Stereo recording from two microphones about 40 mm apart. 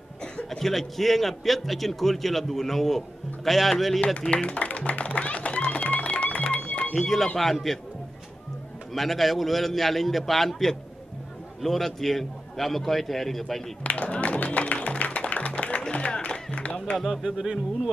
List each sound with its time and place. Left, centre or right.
0.5 s a man's voice: centre
4.0 s music: left
6.9 s a man's voice: centre
8.9 s a man's voice: centre
13.8 s music: left
16.7 s a sound: left
17.4 s speech: centre